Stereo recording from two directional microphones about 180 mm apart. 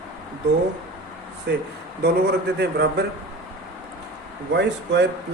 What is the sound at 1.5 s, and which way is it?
Speech, 70° right (ahead or behind).